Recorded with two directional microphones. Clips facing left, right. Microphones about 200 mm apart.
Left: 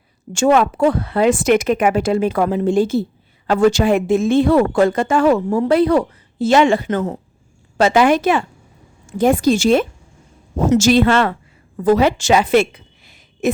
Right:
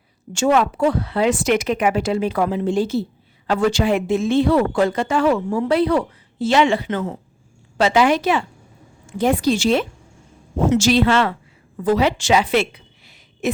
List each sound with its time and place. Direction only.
0.3 s a woman's voice: 50° left (ahead or behind)